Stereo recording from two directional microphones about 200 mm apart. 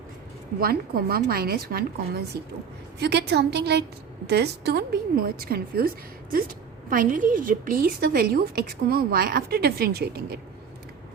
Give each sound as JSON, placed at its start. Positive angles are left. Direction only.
{"t": 0.6, "sound": "a woman's voice", "side_deg": -45}
{"t": 6.9, "sound": "a woman's voice", "side_deg": -45}